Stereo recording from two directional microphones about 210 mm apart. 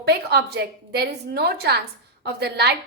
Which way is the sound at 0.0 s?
50° right (ahead or behind).